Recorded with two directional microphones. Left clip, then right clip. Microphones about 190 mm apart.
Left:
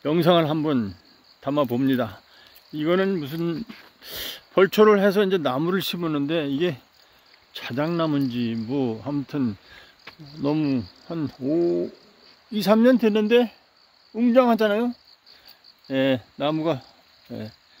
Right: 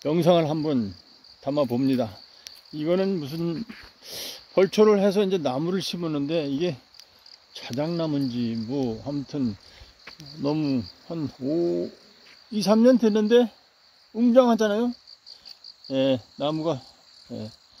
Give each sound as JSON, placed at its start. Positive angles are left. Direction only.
{"t": 0.0, "sound": "speech", "side_deg": -10}
{"t": 3.5, "sound": "speech", "side_deg": 5}
{"t": 15.9, "sound": "speech", "side_deg": -5}